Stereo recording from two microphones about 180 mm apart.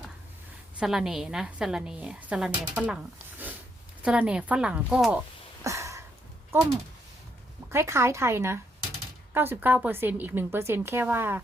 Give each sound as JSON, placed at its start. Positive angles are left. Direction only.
{"t": 0.8, "sound": "a woman's voice", "side_deg": 0}
{"t": 5.6, "sound": "a sound", "side_deg": -15}
{"t": 6.5, "sound": "a woman's voice", "side_deg": -15}
{"t": 7.7, "sound": "a woman's voice", "side_deg": -15}